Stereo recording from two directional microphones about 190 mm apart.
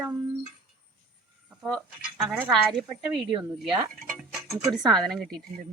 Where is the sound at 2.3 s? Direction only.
5° right (ahead or behind).